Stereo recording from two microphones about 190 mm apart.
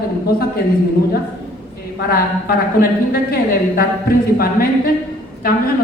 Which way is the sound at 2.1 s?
55° left (ahead or behind).